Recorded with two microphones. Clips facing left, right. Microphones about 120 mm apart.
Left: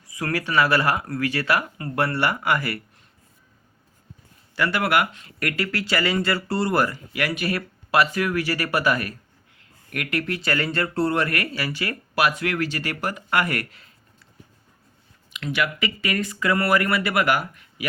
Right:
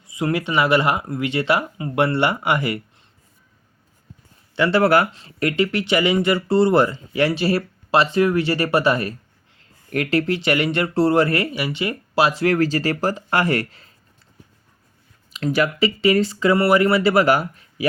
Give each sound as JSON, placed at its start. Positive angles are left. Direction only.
{"t": 0.0, "sound": "speech", "side_deg": -20}
{"t": 4.5, "sound": "speech", "side_deg": -20}
{"t": 4.8, "sound": "speech", "side_deg": -35}
{"t": 15.3, "sound": "speech", "side_deg": -35}